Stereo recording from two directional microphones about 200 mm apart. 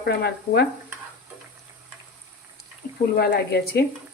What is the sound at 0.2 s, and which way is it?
Speech, 55° left (ahead or behind).